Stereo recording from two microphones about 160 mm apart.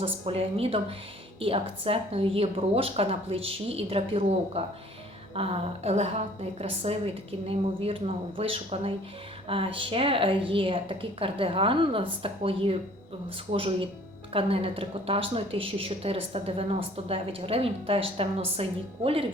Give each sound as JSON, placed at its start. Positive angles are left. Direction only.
{"t": 0.0, "sound": "speech", "side_deg": -35}